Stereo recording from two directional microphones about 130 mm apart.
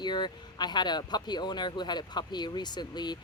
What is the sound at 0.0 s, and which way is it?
Speech, 35° left (ahead or behind).